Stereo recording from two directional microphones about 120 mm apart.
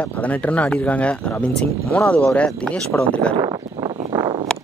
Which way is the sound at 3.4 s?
35° right (ahead or behind).